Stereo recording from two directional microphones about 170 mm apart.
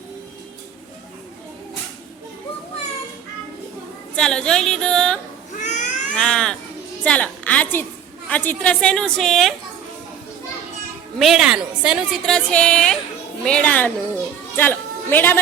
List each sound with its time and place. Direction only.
4.1 s a woman's voice: 5° left (ahead or behind)
5.5 s cat: 45° left (ahead or behind)
6.1 s a woman's voice: 5° left (ahead or behind)
11.2 s a woman's voice: 5° right (ahead or behind)